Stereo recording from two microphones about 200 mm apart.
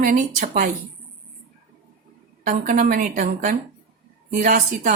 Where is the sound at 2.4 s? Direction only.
40° right (ahead or behind).